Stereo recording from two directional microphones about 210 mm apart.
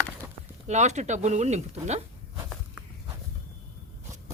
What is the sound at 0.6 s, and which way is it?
Speech, 35° right (ahead or behind).